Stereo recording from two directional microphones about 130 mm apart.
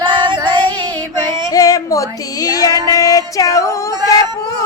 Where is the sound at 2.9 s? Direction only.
25° left (ahead or behind).